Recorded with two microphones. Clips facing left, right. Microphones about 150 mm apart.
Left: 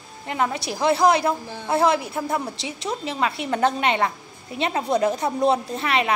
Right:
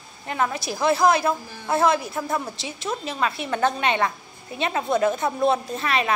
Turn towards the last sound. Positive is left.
turn(degrees=25)  # may be behind; listen again after turning